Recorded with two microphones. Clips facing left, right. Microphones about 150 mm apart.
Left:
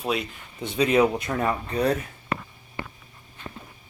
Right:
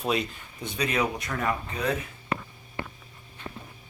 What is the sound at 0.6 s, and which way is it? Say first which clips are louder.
Speech: left 7 dB; 25° left (ahead or behind).